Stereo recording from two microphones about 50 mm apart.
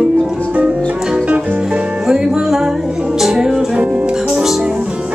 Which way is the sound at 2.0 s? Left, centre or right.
Centre.